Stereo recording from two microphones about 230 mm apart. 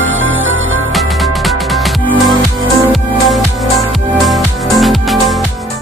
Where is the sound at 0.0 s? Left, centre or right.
Right.